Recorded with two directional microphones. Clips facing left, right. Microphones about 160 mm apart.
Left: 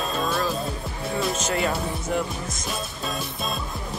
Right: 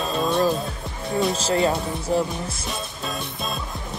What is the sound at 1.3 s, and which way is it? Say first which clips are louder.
Speech: right 4 dB; 30° right (ahead or behind).